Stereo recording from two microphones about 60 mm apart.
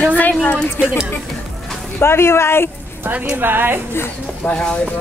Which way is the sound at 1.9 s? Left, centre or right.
Left.